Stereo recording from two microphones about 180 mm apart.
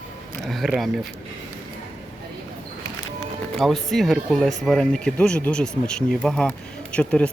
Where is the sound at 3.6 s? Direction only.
Centre (ahead or behind).